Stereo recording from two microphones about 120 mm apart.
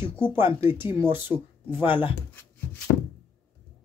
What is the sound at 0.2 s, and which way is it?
Speech, 15° right (ahead or behind).